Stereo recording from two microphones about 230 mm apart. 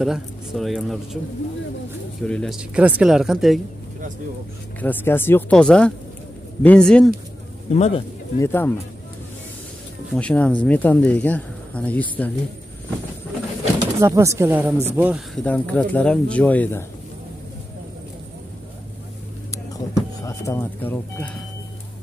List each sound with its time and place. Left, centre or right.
0.0 s speech: centre
2.2 s speech: centre
4.7 s speech: centre
7.7 s speech: left
8.4 s speech: centre
10.1 s speech: centre
13.7 s speech: centre
19.5 s music: centre